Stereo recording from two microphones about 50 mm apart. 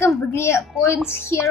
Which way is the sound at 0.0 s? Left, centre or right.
Left.